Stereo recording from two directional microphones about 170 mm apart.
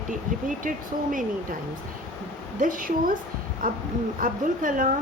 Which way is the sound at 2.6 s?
55° right (ahead or behind).